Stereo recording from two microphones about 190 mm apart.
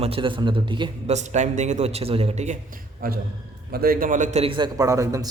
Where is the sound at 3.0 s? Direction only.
50° right (ahead or behind).